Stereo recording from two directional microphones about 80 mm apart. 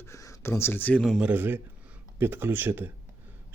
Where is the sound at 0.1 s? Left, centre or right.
Left.